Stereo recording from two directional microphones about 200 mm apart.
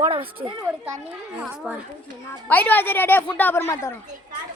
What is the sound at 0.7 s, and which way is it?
A child's voice, 5° right (ahead or behind).